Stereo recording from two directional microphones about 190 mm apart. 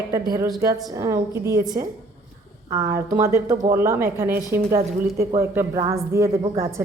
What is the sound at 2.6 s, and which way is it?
A woman's voice, 20° right (ahead or behind).